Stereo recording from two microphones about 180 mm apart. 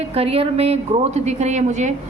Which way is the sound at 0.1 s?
35° right (ahead or behind).